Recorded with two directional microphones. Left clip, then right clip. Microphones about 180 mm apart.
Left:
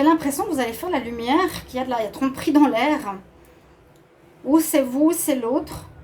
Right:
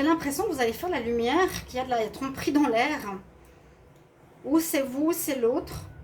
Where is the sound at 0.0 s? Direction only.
50° left (ahead or behind).